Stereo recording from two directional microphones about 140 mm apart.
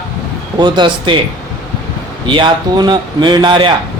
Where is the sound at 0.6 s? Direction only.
30° right (ahead or behind).